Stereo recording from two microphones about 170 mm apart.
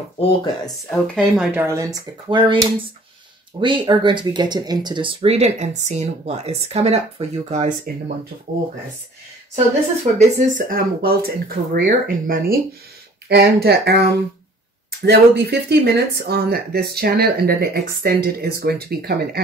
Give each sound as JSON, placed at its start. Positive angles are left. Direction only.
{"t": 0.2, "sound": "speech", "side_deg": 35}
{"t": 0.8, "sound": "speech", "side_deg": 5}
{"t": 10.1, "sound": "speech", "side_deg": -55}
{"t": 13.3, "sound": "speech", "side_deg": -70}